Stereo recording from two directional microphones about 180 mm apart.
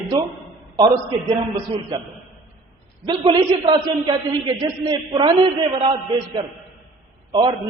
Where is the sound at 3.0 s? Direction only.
25° right (ahead or behind).